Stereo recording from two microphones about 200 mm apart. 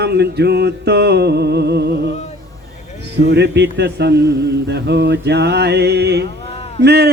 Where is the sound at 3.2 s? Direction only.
60° right (ahead or behind).